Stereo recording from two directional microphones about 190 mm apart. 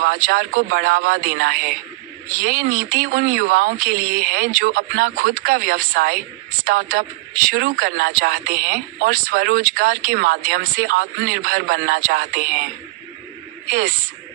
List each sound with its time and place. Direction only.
0.0 s speech: 50° right (ahead or behind)
13.7 s speech: 50° right (ahead or behind)